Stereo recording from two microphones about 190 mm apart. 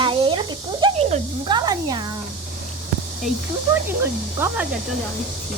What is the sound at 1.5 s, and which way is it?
Music, 20° right (ahead or behind).